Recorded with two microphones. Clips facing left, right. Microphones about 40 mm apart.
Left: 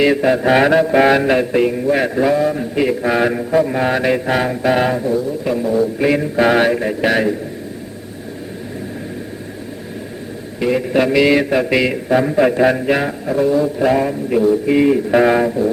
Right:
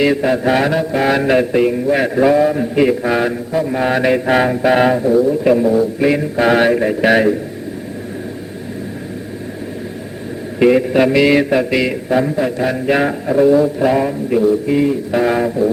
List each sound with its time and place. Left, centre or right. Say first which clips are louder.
0.0 s a man's voice: even; centre
0.5 s music: left 3 dB; centre
1.1 s a man's voice: right 1 dB; centre
5.4 s a man's voice: right 7 dB; right
5.6 s a man's voice: right 2 dB; centre
10.7 s a man's voice: right 2 dB; centre
12.4 s a sound: left 4 dB; left
12.8 s a man's voice: right 2 dB; centre
14.7 s music: left 2 dB; left